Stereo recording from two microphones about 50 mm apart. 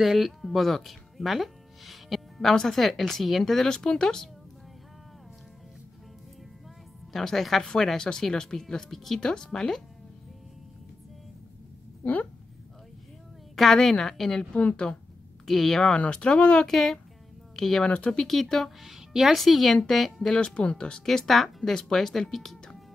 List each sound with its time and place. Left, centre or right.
0.0 s speech: centre
7.1 s speech: centre
12.0 s speech: left
13.6 s speech: centre
14.5 s speech: left
15.4 s speech: centre
16.0 s speech: left
16.6 s speech: centre
17.8 s speech: left
18.2 s speech: centre
20.3 s speech: left
21.0 s speech: centre